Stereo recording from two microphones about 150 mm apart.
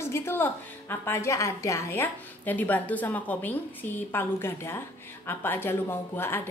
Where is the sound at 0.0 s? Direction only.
15° left (ahead or behind).